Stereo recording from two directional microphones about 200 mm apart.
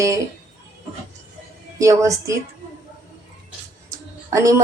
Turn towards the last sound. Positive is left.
turn(degrees=-15)  # may be behind; listen again after turning